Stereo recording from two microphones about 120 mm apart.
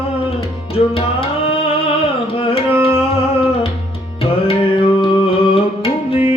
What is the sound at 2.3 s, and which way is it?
Tabla, 50° left (ahead or behind).